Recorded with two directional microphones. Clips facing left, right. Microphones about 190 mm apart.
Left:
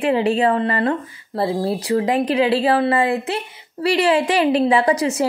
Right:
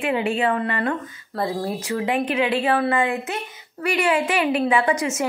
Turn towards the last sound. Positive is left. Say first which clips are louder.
# left 4 dB
turn(degrees=35)  # may be behind; listen again after turning